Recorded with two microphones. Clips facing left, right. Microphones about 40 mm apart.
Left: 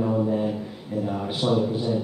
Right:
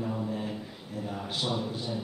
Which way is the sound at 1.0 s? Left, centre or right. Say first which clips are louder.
Left 7 dB; centre.